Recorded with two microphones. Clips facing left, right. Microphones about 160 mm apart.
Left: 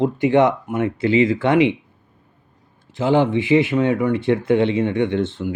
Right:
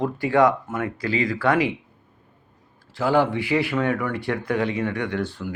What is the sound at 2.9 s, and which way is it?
Speech, 20° left (ahead or behind).